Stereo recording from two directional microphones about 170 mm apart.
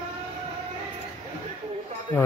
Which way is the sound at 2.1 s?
10° left (ahead or behind).